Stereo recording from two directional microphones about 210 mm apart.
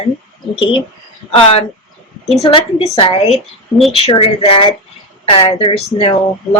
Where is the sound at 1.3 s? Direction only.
25° left (ahead or behind).